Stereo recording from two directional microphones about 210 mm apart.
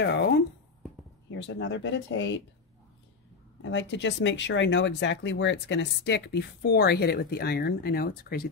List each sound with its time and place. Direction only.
0.0 s a sound: 55° left (ahead or behind)
1.4 s speech: 60° left (ahead or behind)
3.6 s speech: 60° left (ahead or behind)